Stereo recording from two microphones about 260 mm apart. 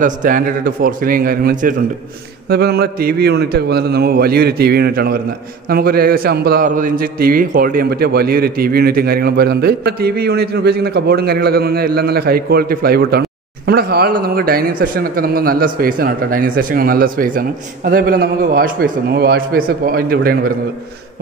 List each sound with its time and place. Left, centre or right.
0.0 s a man's voice: right